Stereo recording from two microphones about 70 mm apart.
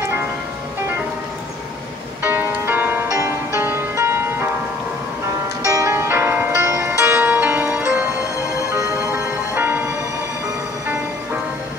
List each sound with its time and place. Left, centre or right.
2.2 s music: right
5.7 s music: right
5.9 s music: right
9.1 s music: right